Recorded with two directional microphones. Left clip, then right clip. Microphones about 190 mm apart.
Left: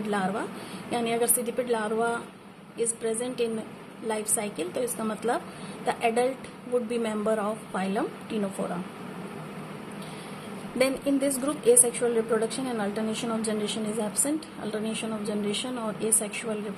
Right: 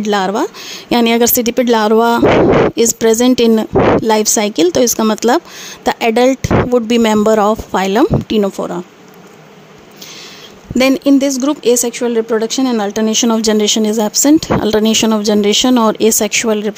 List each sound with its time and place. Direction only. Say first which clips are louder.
0.1 s a woman's voice: right 15 dB; 50° right (ahead or behind)
10.8 s speech: right 14 dB; 50° right (ahead or behind)